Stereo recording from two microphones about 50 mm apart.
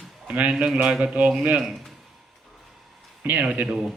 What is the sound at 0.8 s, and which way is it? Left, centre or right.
Speech, right.